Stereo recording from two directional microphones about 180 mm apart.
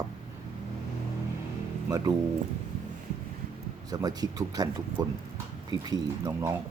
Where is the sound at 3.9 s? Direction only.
20° right (ahead or behind).